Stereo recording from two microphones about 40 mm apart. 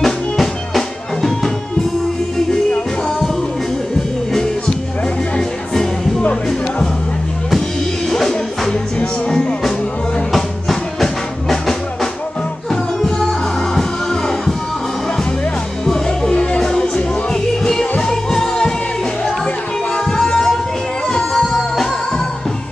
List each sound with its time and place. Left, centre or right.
0.0 s music: centre
4.3 s music: centre
8.1 s music: centre
10.3 s music: centre
13.7 s music: centre
15.9 s music: centre
20.1 s music: centre